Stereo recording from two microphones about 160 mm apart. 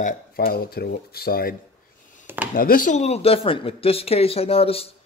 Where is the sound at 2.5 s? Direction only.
60° left (ahead or behind); by 4.9 s 40° left (ahead or behind).